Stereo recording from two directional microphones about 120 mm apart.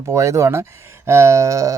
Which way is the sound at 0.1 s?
25° right (ahead or behind).